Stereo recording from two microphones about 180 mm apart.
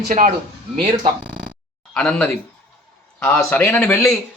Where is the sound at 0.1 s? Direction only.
45° right (ahead or behind).